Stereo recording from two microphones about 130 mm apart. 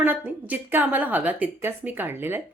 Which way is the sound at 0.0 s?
10° right (ahead or behind).